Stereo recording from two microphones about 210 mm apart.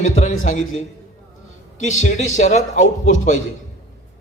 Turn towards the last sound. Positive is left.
turn(degrees=35)  # may be behind; listen again after turning